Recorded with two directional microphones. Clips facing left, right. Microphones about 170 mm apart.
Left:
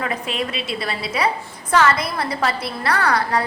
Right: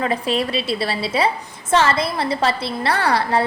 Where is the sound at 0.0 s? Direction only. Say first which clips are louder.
Right 4 dB; 30° right (ahead or behind).